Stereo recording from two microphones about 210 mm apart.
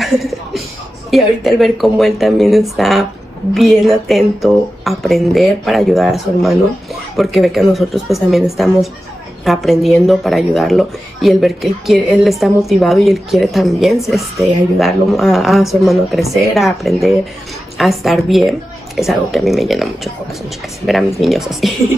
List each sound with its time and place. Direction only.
0.0 s speech: centre (ahead or behind)